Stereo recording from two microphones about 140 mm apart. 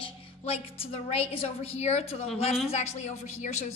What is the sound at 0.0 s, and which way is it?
A woman's voice, 40° left (ahead or behind).